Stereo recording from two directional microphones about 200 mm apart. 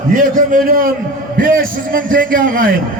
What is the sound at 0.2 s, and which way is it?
A man's voice, 45° right (ahead or behind).